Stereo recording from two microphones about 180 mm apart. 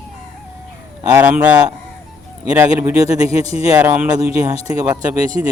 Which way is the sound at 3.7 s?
10° right (ahead or behind).